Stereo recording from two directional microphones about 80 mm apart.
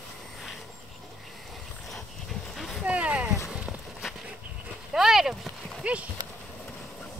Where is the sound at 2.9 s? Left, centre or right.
Centre.